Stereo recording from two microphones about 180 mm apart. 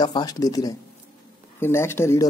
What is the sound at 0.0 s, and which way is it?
A man's voice, 25° left (ahead or behind).